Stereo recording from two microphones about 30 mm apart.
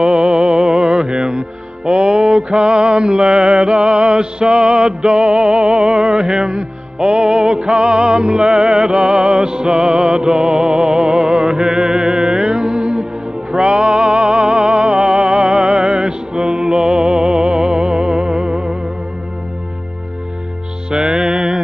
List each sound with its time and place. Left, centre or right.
0.0 s music: right
1.9 s mantra: right
13.5 s music: right
20.9 s music: right